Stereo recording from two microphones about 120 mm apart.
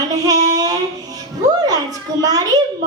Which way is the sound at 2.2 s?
35° right (ahead or behind).